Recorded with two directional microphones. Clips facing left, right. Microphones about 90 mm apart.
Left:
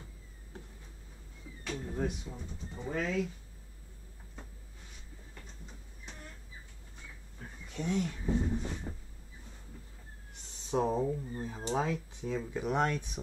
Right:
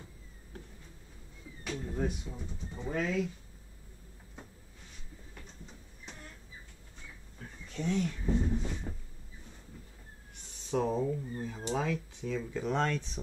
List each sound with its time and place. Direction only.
1.7 s speech: 5° left (ahead or behind)
7.6 s speech: 15° left (ahead or behind)
10.7 s speech: 25° left (ahead or behind)